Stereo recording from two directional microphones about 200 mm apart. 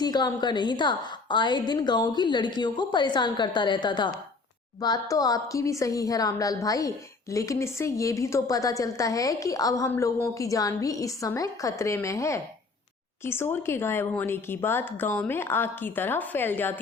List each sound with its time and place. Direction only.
0.0 s a woman's voice: 20° left (ahead or behind)